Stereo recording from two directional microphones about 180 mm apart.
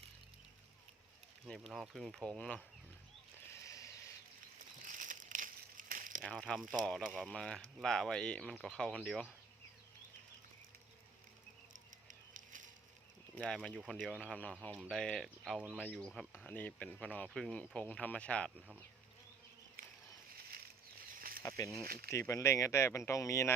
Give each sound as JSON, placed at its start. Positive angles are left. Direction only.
{"t": 1.7, "sound": "speech", "side_deg": 0}
{"t": 3.5, "sound": "a sound", "side_deg": 20}
{"t": 4.9, "sound": "crumpling", "side_deg": -45}
{"t": 6.2, "sound": "speech", "side_deg": 5}
{"t": 12.0, "sound": "fire", "side_deg": -45}
{"t": 13.3, "sound": "speech", "side_deg": 5}
{"t": 21.2, "sound": "snake", "side_deg": -55}
{"t": 21.4, "sound": "speech", "side_deg": 15}
{"t": 21.8, "sound": "speech", "side_deg": -55}
{"t": 22.1, "sound": "speech", "side_deg": 15}